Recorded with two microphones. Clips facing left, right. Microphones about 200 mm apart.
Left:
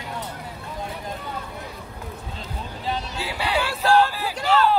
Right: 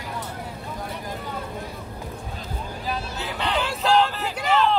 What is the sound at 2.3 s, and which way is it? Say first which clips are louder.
Vehicle: right 1 dB; 25° left (ahead or behind).